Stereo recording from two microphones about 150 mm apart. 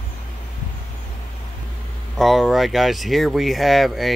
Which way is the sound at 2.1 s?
Centre (ahead or behind).